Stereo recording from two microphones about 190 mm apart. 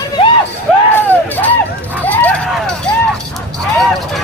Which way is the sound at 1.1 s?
10° left (ahead or behind).